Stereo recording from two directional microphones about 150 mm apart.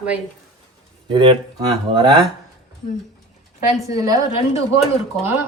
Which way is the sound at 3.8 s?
25° right (ahead or behind).